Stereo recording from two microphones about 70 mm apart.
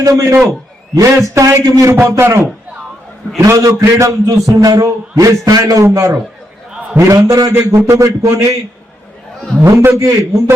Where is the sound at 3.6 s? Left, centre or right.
Right.